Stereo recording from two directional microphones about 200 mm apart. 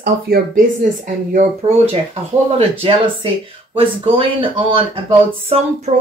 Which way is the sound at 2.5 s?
25° right (ahead or behind).